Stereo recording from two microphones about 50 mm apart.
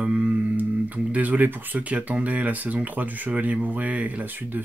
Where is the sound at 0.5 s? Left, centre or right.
Right.